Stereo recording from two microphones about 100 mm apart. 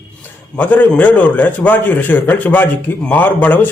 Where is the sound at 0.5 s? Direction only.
15° left (ahead or behind).